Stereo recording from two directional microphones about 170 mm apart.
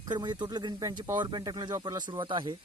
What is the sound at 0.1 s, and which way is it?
Speech, 25° right (ahead or behind).